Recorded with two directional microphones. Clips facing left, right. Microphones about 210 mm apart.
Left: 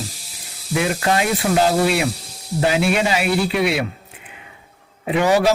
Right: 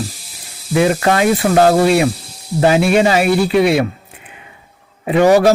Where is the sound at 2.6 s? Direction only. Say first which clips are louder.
Right 6 dB; 45° right (ahead or behind).